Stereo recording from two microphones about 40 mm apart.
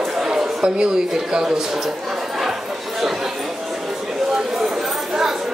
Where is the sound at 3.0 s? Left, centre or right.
Centre.